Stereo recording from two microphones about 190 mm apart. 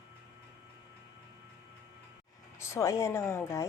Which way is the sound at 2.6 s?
15° left (ahead or behind).